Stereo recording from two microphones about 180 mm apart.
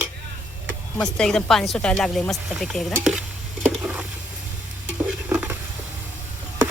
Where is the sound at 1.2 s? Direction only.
5° left (ahead or behind).